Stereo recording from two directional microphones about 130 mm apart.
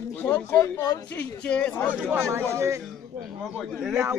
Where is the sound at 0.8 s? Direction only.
30° left (ahead or behind).